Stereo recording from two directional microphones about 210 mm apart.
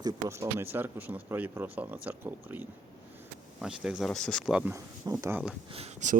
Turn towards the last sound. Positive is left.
turn(degrees=-35)  # may be behind; listen again after turning